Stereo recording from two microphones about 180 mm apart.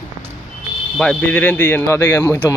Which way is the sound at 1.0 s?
5° left (ahead or behind).